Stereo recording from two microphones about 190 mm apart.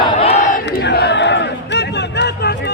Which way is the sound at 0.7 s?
60° left (ahead or behind).